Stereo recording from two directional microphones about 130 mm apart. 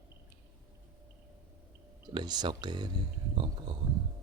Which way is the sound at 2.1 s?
35° right (ahead or behind).